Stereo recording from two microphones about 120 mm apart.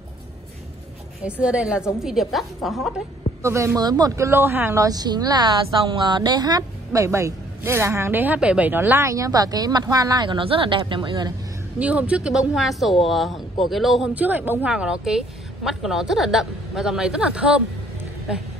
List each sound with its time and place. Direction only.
1.4 s a woman's voice: 10° right (ahead or behind)
3.4 s speech: 25° right (ahead or behind)
4.3 s speech: 20° right (ahead or behind)
4.8 s a woman's voice: 35° right (ahead or behind)
11.8 s a woman's voice: 10° right (ahead or behind)
14.1 s a woman's voice: 15° right (ahead or behind)